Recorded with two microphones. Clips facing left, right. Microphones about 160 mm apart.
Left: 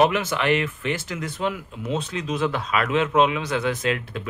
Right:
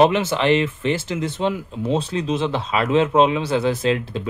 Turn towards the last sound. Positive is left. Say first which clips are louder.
# right 5 dB
turn(degrees=-30)  # may be behind; listen again after turning